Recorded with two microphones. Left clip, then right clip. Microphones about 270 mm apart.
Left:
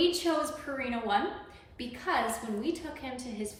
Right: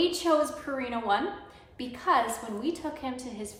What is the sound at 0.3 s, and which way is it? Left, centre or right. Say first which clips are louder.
A woman's voice: right 5 dB; centre.